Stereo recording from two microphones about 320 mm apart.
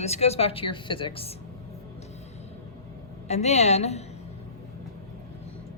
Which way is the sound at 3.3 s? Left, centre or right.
Left.